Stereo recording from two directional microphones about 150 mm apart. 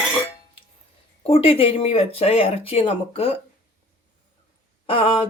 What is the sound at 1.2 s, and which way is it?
Speech, 40° left (ahead or behind).